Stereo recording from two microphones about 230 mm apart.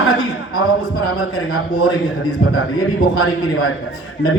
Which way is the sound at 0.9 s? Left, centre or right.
Left.